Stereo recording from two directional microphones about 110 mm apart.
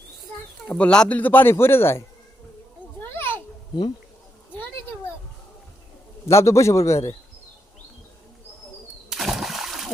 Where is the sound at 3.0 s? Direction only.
20° left (ahead or behind).